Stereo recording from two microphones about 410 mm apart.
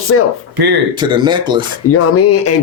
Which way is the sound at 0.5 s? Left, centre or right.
Right.